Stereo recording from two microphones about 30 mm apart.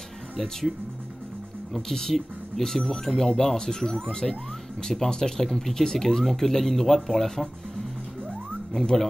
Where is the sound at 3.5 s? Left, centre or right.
Left.